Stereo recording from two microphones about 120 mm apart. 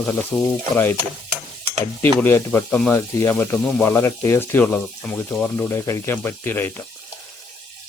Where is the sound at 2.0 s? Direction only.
15° left (ahead or behind).